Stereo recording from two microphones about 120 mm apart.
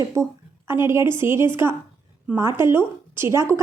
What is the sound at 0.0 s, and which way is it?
A woman's voice, 25° right (ahead or behind).